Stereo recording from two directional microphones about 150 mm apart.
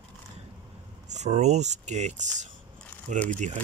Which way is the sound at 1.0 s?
50° right (ahead or behind).